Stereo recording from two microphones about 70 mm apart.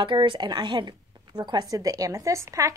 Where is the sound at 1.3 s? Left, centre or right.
Right.